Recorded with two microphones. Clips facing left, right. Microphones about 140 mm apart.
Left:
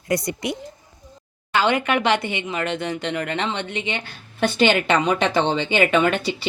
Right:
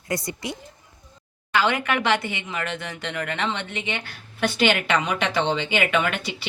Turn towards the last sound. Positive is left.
turn(degrees=30)  # may be behind; listen again after turning